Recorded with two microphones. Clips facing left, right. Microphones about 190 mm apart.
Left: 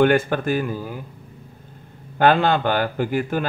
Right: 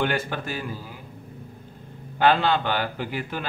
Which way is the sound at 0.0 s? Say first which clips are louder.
Left 9 dB; 50° left (ahead or behind).